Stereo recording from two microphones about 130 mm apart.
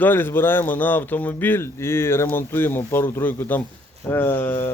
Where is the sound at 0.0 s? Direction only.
15° left (ahead or behind).